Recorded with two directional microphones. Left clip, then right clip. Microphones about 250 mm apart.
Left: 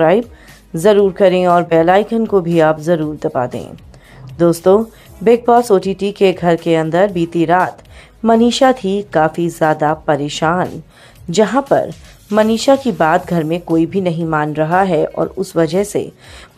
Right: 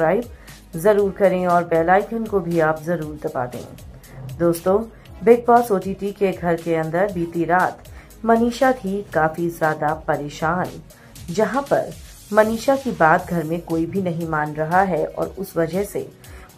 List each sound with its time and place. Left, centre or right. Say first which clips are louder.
0.8 s speech: left 6 dB; left